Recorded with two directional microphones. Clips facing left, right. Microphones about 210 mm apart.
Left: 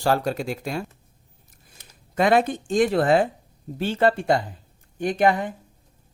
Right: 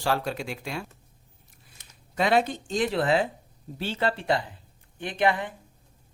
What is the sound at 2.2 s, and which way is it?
Speech, 50° left (ahead or behind).